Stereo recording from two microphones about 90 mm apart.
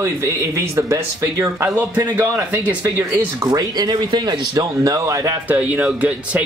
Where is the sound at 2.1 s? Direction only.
20° right (ahead or behind).